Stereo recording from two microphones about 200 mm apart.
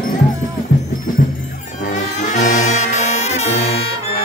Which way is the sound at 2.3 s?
40° left (ahead or behind).